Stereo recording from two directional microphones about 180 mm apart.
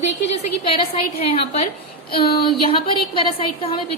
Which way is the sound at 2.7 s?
30° left (ahead or behind).